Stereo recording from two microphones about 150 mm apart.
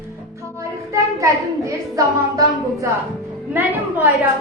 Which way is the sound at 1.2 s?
20° right (ahead or behind).